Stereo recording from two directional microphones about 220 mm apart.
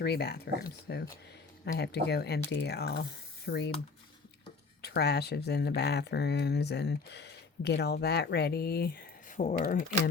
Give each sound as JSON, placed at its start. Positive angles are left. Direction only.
{"t": 0.0, "sound": "speech", "side_deg": 45}
{"t": 4.8, "sound": "speech", "side_deg": 50}